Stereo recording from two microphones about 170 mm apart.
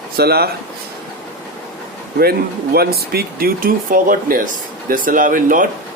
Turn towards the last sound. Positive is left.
turn(degrees=-50)  # may be behind; listen again after turning